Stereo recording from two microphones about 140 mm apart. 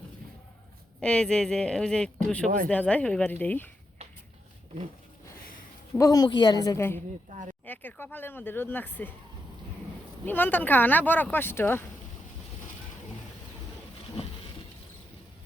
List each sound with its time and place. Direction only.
0.9 s speech: 5° left (ahead or behind)
5.9 s a woman's voice: 25° left (ahead or behind)
7.3 s speech: 65° right (ahead or behind)
7.6 s speech: 15° left (ahead or behind)
10.2 s speech: 15° left (ahead or behind)